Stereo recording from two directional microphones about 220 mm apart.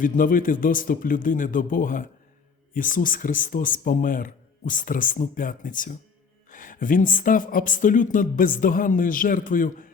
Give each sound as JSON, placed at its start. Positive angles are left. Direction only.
{"t": 0.0, "sound": "speech", "side_deg": 40}